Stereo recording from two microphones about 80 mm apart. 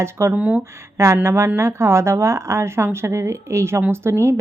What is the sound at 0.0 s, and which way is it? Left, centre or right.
Speech, right.